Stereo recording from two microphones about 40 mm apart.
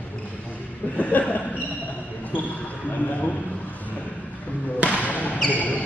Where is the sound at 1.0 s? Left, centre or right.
Left.